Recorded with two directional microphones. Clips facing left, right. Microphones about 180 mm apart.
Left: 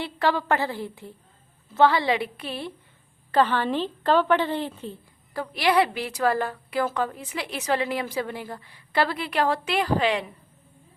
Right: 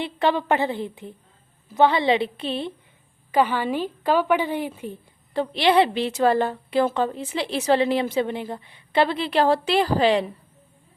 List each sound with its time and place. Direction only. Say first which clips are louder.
0.0 s a woman's voice: right 2 dB; 20° right (ahead or behind)
3.3 s a woman's voice: right 1 dB; 10° right (ahead or behind)
5.3 s a woman's voice: right 4 dB; 25° right (ahead or behind)